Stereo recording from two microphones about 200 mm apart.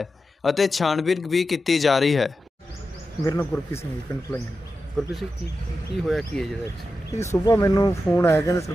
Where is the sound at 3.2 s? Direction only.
15° left (ahead or behind).